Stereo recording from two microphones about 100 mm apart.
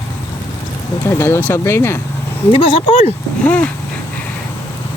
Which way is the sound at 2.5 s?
75° left (ahead or behind).